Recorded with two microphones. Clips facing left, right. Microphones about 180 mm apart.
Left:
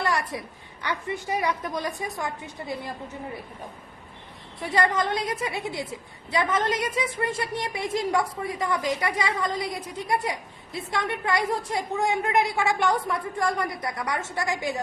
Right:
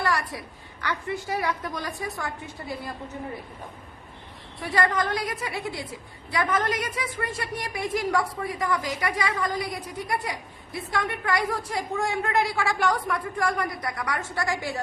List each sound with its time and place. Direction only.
0.0 s a woman's voice: 20° left (ahead or behind)
4.6 s a woman's voice: 25° left (ahead or behind)